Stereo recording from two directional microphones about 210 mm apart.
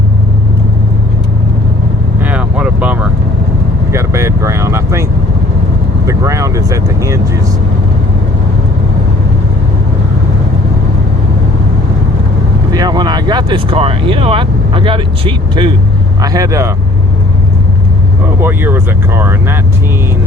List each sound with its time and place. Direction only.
2.2 s vehicle: 5° right (ahead or behind)
6.1 s vehicle: 15° right (ahead or behind)
12.7 s speech: 20° right (ahead or behind)
18.3 s speech: 10° right (ahead or behind)